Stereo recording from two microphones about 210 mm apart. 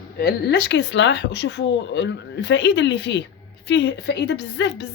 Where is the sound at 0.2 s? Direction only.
50° left (ahead or behind).